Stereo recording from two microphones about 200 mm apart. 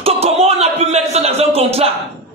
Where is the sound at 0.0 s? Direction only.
30° right (ahead or behind).